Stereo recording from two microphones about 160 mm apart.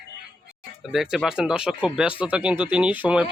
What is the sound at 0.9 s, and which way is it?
A man's voice, centre (ahead or behind).